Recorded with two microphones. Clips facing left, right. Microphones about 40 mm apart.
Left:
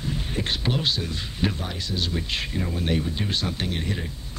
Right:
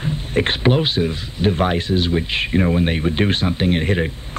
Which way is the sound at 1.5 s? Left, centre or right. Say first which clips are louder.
Right 15 dB; right.